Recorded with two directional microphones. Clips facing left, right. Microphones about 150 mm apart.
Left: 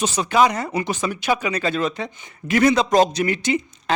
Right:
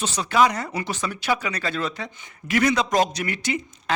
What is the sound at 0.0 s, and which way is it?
Speech, 20° left (ahead or behind).